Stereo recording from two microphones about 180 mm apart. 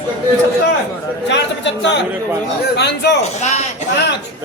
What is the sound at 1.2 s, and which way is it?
A man's voice, 75° left (ahead or behind).